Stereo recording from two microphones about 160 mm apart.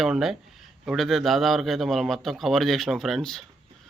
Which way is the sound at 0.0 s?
Centre (ahead or behind).